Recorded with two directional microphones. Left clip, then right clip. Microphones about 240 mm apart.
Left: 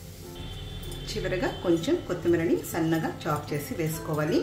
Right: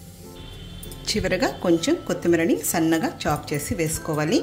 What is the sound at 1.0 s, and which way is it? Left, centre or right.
Speech, right.